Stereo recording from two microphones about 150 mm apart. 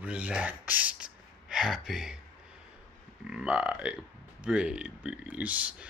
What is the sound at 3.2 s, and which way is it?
Speech, 5° right (ahead or behind).